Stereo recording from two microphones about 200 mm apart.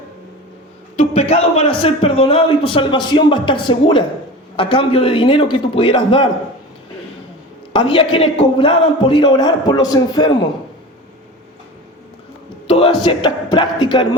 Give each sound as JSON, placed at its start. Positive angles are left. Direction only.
{"t": 0.9, "sound": "a man's voice", "side_deg": 30}
{"t": 7.7, "sound": "a man's voice", "side_deg": 25}
{"t": 12.6, "sound": "a sound", "side_deg": 25}
{"t": 13.1, "sound": "a man's voice", "side_deg": 25}